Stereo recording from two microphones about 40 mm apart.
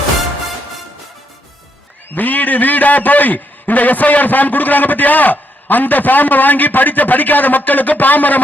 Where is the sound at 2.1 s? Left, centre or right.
Left.